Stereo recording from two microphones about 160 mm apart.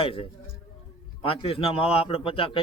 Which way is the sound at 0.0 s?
35° left (ahead or behind).